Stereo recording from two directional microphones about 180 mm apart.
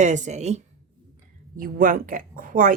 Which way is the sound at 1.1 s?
50° right (ahead or behind).